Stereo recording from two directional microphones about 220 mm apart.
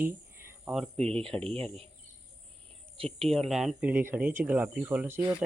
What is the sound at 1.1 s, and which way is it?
Speech, 25° right (ahead or behind).